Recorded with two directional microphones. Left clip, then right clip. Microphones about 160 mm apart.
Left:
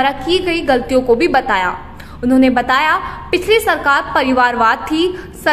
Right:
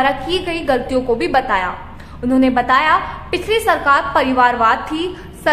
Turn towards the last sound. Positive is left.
turn(degrees=25)  # may be behind; listen again after turning